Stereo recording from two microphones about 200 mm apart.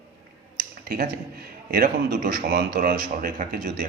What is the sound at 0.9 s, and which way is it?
A man's voice, 50° right (ahead or behind).